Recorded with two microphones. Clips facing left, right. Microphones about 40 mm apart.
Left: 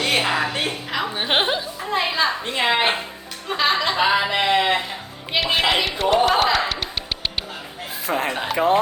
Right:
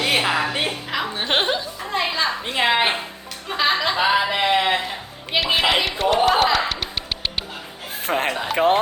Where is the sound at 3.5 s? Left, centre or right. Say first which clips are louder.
Even; centre.